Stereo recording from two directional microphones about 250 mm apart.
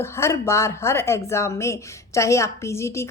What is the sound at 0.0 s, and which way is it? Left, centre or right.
A woman's voice, centre.